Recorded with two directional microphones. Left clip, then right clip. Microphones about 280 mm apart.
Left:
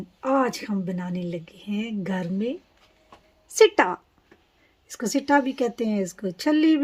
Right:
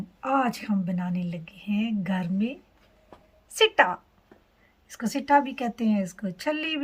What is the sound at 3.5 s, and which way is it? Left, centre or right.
Speech, left.